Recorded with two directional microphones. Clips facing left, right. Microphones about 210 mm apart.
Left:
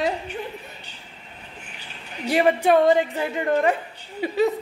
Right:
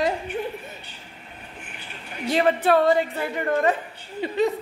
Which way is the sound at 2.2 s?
10° left (ahead or behind).